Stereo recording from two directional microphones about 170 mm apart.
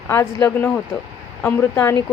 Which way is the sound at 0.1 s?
15° left (ahead or behind).